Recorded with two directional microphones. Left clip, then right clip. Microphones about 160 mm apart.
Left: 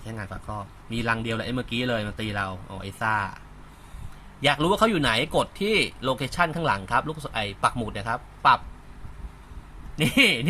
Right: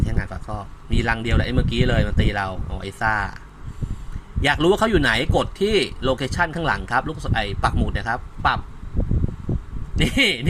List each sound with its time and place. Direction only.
0.0 s speech: 20° right (ahead or behind)
4.4 s speech: 10° right (ahead or behind)
9.9 s speech: 15° right (ahead or behind)